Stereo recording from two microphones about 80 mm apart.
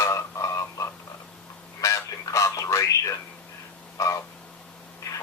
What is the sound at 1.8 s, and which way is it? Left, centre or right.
Radio, left.